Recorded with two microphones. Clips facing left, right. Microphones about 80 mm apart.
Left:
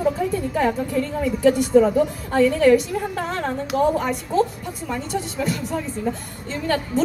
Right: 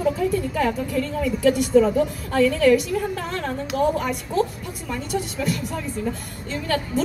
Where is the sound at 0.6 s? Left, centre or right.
Left.